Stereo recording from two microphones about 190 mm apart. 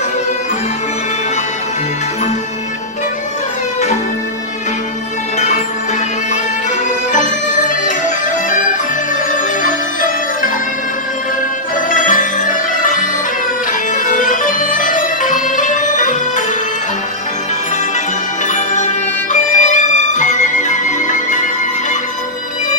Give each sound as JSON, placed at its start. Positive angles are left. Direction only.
{"t": 7.1, "sound": "music", "side_deg": 40}
{"t": 9.3, "sound": "music", "side_deg": 45}
{"t": 11.9, "sound": "music", "side_deg": 45}
{"t": 14.0, "sound": "music", "side_deg": 45}
{"t": 19.3, "sound": "music", "side_deg": 40}